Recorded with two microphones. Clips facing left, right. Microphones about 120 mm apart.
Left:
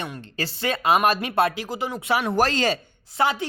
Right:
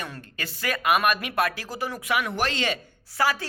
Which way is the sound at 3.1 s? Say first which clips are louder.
Left 2 dB; 20° left (ahead or behind).